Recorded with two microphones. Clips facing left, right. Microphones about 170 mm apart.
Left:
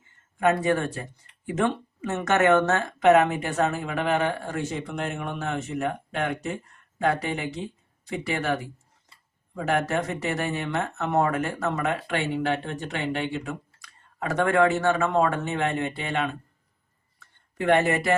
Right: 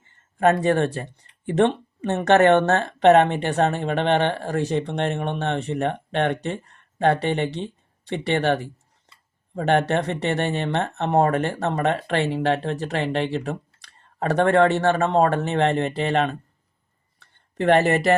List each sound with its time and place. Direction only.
0.3 s speech: 35° right (ahead or behind)
10.4 s speech: 30° right (ahead or behind)
17.2 s a sound: 35° right (ahead or behind)